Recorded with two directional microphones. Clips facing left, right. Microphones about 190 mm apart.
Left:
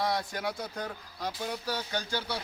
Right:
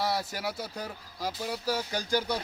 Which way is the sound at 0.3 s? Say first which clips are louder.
Even; 5° right (ahead or behind).